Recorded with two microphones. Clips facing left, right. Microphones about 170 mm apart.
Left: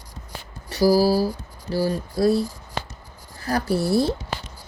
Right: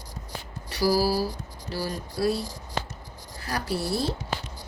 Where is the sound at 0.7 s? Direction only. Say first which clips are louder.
Left 6 dB; 40° left (ahead or behind).